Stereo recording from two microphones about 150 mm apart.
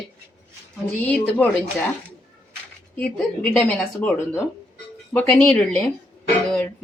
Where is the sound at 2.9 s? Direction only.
5° left (ahead or behind).